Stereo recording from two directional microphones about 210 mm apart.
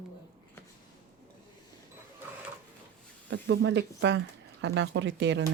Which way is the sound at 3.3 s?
55° right (ahead or behind).